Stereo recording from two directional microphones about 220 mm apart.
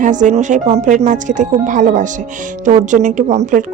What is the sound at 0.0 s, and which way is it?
A woman's voice, 35° right (ahead or behind).